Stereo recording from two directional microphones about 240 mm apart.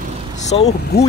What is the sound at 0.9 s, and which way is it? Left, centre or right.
Speech, left.